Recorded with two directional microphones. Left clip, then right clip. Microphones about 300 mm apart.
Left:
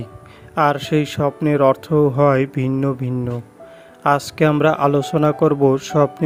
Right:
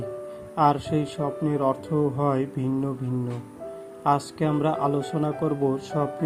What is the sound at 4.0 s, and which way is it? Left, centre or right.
Speech, left.